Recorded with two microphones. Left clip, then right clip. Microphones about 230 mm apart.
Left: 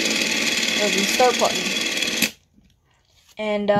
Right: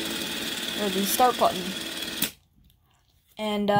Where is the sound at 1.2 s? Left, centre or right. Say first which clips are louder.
Left 3 dB; right.